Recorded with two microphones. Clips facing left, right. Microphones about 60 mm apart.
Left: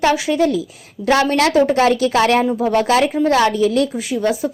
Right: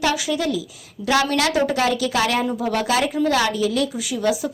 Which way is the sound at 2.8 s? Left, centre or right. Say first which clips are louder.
Left 5 dB; left.